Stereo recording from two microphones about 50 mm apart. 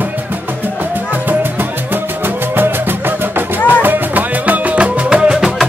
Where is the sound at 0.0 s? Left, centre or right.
Right.